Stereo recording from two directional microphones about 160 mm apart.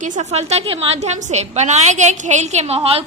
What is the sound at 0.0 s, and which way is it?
A woman's voice, 50° right (ahead or behind).